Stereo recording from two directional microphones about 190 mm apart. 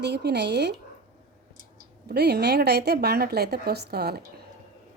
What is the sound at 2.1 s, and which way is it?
A woman's voice, 60° right (ahead or behind).